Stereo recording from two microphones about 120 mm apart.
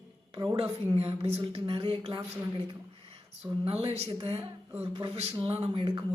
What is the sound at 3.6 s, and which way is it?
A woman's voice, 55° right (ahead or behind).